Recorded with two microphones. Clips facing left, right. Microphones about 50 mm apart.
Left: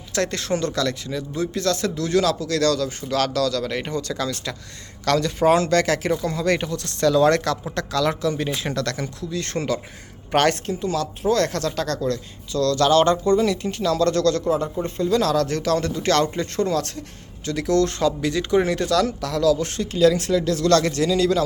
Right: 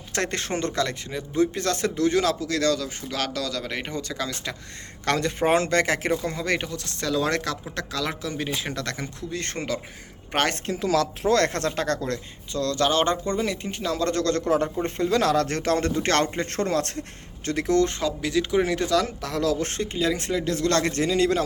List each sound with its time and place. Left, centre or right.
0.1 s speech: right
5.0 s speech: right; by 8.8 s centre
8.8 s speech: centre
9.3 s speech: right
10.7 s speech: right
11.5 s speech: right
12.5 s speech: right
14.8 s speech: right
18.0 s speech: centre; by 21.4 s right